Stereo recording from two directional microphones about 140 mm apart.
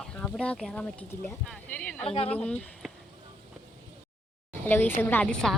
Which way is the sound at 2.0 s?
45° left (ahead or behind).